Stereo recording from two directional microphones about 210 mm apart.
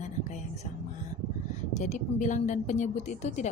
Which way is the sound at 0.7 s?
35° left (ahead or behind).